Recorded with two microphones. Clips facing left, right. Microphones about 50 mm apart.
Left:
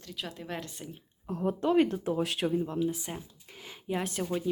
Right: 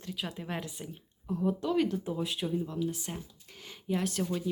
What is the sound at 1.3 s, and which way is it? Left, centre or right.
Speech, left.